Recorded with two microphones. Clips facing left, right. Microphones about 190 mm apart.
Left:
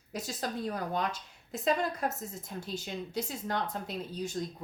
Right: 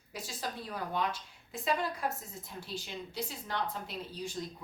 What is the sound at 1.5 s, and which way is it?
A woman's voice, 45° left (ahead or behind).